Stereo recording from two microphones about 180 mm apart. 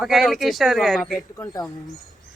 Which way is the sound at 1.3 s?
20° left (ahead or behind).